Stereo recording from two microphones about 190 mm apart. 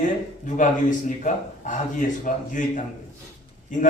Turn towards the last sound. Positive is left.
turn(degrees=45)  # may be behind; listen again after turning